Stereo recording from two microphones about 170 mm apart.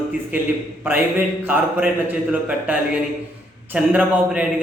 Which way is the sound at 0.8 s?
10° right (ahead or behind).